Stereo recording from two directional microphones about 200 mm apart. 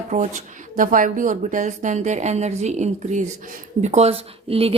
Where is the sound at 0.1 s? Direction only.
35° right (ahead or behind).